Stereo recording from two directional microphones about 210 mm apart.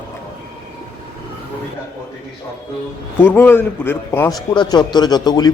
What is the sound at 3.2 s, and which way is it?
A man's voice, 10° left (ahead or behind).